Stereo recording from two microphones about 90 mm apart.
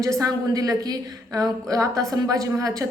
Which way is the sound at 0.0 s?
40° right (ahead or behind).